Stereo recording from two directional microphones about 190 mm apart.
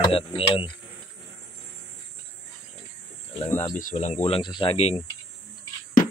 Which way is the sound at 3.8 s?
40° left (ahead or behind).